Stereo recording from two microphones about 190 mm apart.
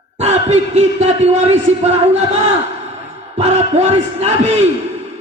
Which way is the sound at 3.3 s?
35° right (ahead or behind).